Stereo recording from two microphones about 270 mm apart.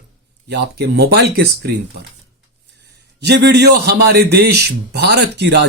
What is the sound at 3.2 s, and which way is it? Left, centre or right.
A man's voice, right.